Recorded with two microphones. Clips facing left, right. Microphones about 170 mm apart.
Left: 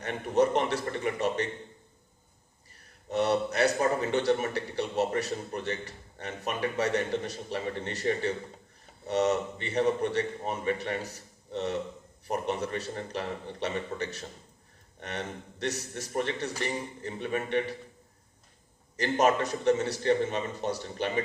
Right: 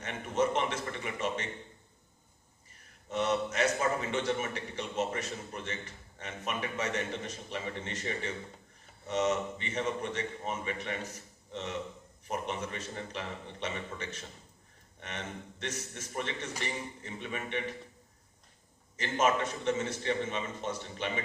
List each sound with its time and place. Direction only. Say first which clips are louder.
0.0 s a man's voice: left 5 dB; 40° left (ahead or behind)
3.1 s a man's voice: left 4 dB; 35° left (ahead or behind)
18.9 s a man's voice: left 4 dB; 40° left (ahead or behind)